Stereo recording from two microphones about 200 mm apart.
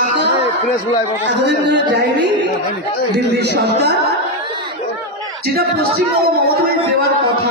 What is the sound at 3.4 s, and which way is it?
Speech, 55° right (ahead or behind).